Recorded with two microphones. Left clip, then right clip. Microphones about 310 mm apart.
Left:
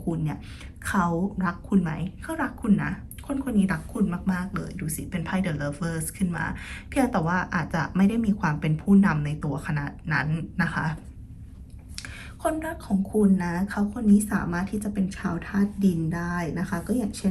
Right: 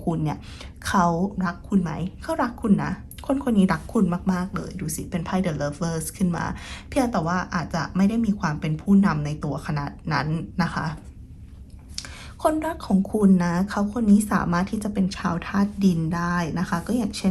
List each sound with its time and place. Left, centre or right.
0.9 s a woman's voice: centre
11.9 s a sound: centre
13.3 s a woman's voice: centre